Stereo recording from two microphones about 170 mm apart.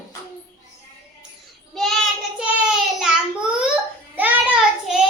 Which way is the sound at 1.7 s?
Centre (ahead or behind).